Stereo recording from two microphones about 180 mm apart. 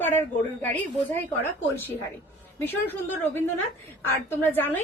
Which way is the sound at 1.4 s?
10° left (ahead or behind).